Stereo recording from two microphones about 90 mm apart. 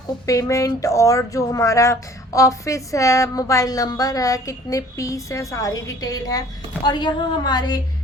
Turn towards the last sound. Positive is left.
turn(degrees=50)  # may be behind; listen again after turning